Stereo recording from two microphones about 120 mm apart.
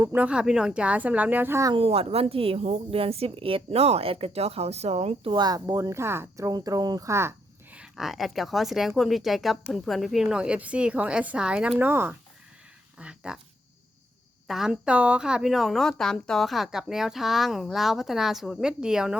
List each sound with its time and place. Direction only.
0.1 s speech: 10° right (ahead or behind)
1.7 s a woman's voice: 55° right (ahead or behind)
5.2 s speech: 40° right (ahead or behind); by 7.8 s 20° right (ahead or behind)
7.8 s a woman's voice: centre (ahead or behind)
14.4 s a woman's voice: 5° right (ahead or behind)